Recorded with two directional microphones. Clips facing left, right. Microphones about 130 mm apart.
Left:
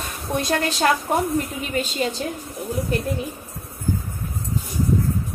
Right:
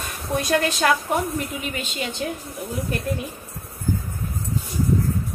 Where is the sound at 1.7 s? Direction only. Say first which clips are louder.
Left 6 dB; 40° left (ahead or behind).